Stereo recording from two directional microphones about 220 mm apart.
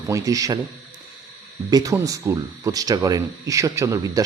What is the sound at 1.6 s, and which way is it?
Speech, 15° right (ahead or behind).